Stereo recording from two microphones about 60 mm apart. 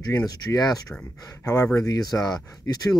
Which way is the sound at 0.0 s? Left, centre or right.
Left.